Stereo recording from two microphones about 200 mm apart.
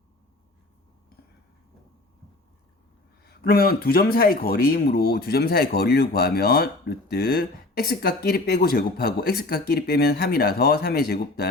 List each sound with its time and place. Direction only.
3.2 s speech: 50° left (ahead or behind)